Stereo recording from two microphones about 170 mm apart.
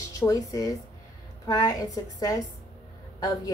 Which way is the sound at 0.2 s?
20° left (ahead or behind).